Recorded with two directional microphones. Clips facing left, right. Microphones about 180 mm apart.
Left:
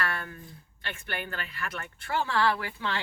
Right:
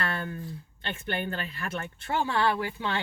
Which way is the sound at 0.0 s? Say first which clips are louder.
Right 2 dB; 25° right (ahead or behind).